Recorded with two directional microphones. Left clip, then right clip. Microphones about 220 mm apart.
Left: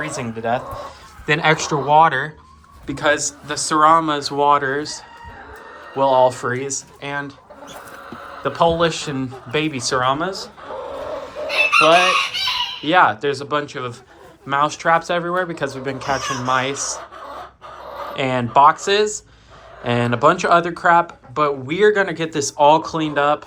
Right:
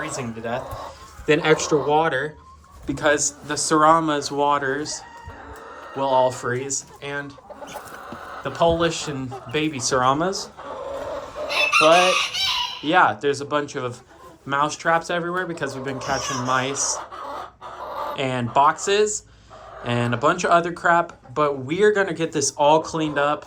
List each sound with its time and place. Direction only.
0.0 s a man's voice: 5° right (ahead or behind)
8.4 s speech: 5° right (ahead or behind); by 10.5 s 25° right (ahead or behind)
11.8 s speech: 15° right (ahead or behind)
18.1 s speech: 10° right (ahead or behind)